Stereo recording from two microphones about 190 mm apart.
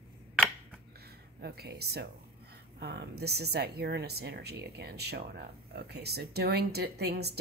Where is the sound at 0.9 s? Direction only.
55° right (ahead or behind).